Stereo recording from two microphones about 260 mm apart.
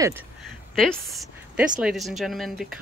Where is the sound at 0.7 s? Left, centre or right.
Centre.